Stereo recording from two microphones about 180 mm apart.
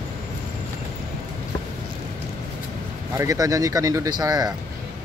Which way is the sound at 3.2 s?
20° right (ahead or behind).